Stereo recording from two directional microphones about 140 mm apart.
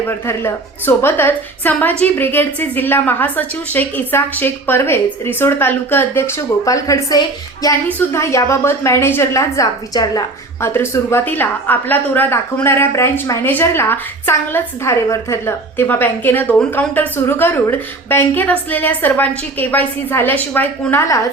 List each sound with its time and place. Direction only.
0.1 s a woman's voice: 15° left (ahead or behind)
10.7 s a woman's voice: 15° left (ahead or behind)